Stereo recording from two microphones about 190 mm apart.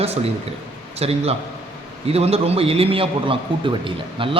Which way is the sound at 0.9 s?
30° right (ahead or behind).